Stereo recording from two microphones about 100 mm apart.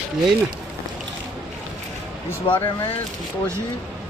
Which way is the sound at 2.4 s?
55° left (ahead or behind).